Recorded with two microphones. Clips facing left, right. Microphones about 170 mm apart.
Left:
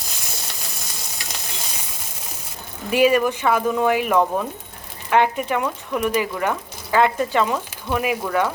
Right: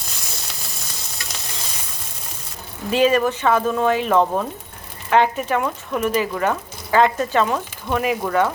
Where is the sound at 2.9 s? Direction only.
10° left (ahead or behind).